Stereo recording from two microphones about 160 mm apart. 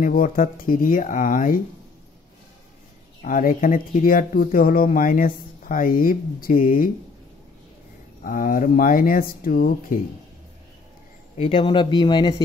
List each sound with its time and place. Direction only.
0.0 s speech: 60° left (ahead or behind)
3.2 s speech: 55° left (ahead or behind)
8.2 s speech: 60° left (ahead or behind)
11.3 s speech: 35° left (ahead or behind)